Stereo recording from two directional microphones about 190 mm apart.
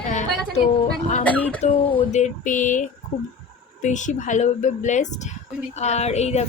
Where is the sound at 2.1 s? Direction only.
40° left (ahead or behind).